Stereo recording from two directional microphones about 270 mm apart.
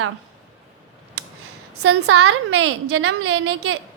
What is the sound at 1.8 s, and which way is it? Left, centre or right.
A woman's voice, right.